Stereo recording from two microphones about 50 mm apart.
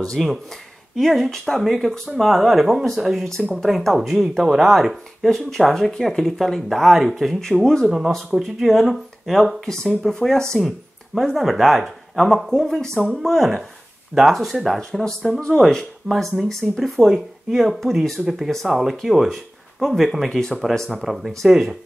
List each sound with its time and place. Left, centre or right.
0.2 s speech: centre
5.5 s speech: centre
7.4 s speech: centre
8.3 s speech: centre
11.3 s speech: centre
14.8 s speech: centre
20.2 s speech: centre
20.9 s speech: centre